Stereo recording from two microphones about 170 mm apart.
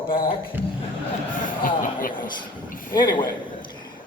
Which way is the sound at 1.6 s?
55° left (ahead or behind).